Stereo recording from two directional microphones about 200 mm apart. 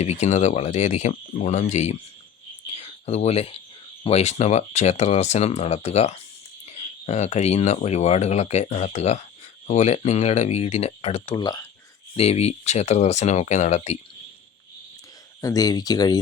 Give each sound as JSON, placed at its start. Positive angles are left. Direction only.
{"t": 0.0, "sound": "speech", "side_deg": 35}
{"t": 2.7, "sound": "a sound", "side_deg": 30}
{"t": 4.0, "sound": "speech", "side_deg": 30}
{"t": 11.4, "sound": "speech", "side_deg": 20}
{"t": 12.1, "sound": "speech", "side_deg": 30}
{"t": 15.4, "sound": "speech", "side_deg": 15}